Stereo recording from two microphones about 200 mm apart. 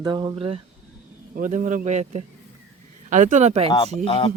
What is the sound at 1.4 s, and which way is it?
Speech, 40° right (ahead or behind).